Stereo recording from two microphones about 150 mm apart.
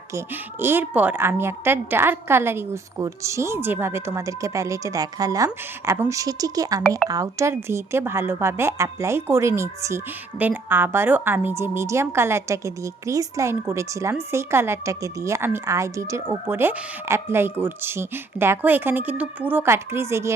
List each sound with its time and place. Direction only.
0.1 s speech: 15° right (ahead or behind)